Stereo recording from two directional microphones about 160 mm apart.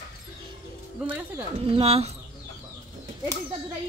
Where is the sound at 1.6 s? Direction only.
35° right (ahead or behind).